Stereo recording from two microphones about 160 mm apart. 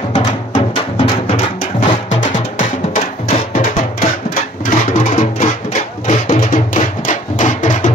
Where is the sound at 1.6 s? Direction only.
45° left (ahead or behind).